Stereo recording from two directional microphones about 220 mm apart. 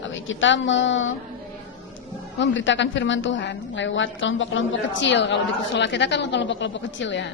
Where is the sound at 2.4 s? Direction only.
55° left (ahead or behind).